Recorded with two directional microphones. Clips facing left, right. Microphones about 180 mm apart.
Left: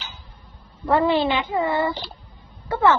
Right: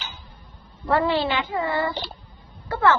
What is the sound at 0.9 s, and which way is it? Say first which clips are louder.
Speech: left 3 dB; 20° left (ahead or behind).